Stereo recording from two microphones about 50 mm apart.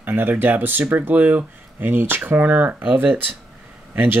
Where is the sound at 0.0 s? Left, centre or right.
Right.